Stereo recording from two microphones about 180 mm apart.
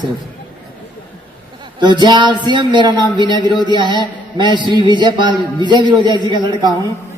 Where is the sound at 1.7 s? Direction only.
25° right (ahead or behind).